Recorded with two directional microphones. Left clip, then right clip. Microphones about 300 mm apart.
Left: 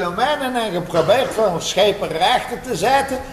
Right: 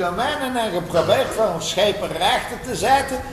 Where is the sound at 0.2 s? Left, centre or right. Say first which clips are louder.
Left 3 dB; left.